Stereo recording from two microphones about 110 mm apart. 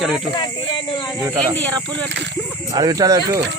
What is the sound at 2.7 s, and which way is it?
Speech, 35° right (ahead or behind).